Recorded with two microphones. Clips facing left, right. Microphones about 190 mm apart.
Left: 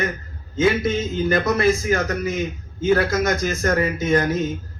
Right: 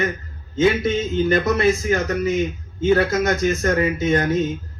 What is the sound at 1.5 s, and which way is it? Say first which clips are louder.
A man's voice: even; 20° right (ahead or behind).